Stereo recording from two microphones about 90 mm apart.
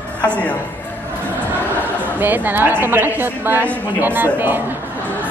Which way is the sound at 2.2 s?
20° right (ahead or behind).